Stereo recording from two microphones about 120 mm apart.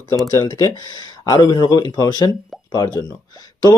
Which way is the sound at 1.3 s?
30° left (ahead or behind).